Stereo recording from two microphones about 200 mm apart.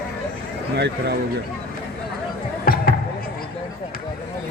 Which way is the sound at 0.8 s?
55° right (ahead or behind).